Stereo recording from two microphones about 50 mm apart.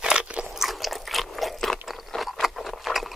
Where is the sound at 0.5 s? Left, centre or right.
Centre.